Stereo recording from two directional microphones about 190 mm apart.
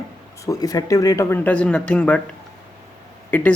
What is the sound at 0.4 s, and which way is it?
Speech, 20° left (ahead or behind).